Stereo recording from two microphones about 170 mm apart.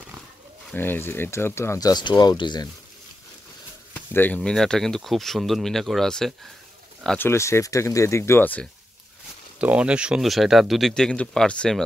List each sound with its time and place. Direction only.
0.7 s speech: 10° left (ahead or behind)
3.9 s speech: 10° left (ahead or behind)
7.2 s speech: 15° left (ahead or behind)
9.6 s speech: 5° right (ahead or behind)